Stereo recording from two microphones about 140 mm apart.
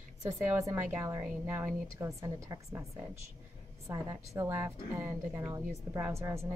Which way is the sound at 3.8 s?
25° right (ahead or behind).